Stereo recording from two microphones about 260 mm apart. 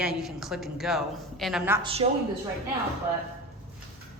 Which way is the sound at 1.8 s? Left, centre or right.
Right.